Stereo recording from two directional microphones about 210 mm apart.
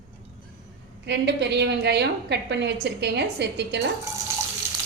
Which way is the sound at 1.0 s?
55° right (ahead or behind).